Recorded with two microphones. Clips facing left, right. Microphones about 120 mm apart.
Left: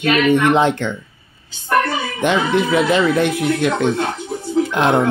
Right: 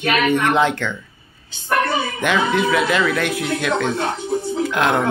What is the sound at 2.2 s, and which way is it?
Speech, 25° left (ahead or behind).